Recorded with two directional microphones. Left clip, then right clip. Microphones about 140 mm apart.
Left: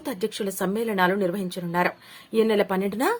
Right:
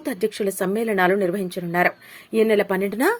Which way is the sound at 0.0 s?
15° right (ahead or behind).